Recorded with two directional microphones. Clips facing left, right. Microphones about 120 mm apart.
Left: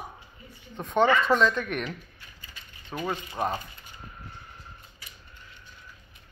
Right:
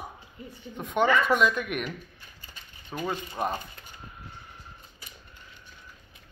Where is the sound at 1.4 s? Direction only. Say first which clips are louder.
Left 1 dB; 10° right (ahead or behind).